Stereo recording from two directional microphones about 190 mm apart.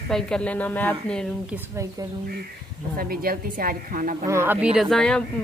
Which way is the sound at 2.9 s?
50° right (ahead or behind).